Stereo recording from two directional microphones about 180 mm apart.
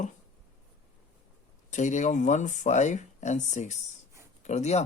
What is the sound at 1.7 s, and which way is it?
Speech, 45° left (ahead or behind).